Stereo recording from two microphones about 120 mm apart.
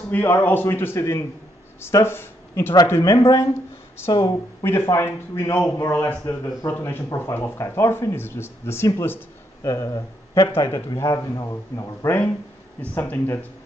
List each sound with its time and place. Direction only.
0.1 s a man's voice: 15° left (ahead or behind); by 4.6 s 35° left (ahead or behind)
4.6 s a man's voice: 20° left (ahead or behind)